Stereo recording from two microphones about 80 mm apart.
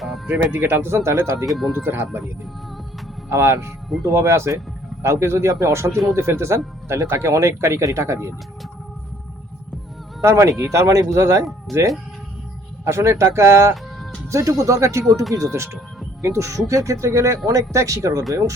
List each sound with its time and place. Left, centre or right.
0.3 s speech: right
1.5 s speech: centre
1.7 s speech: right
3.2 s speech: right
10.2 s speech: right